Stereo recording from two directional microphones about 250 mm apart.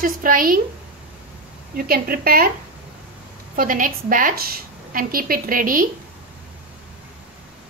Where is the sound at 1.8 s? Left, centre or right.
Right.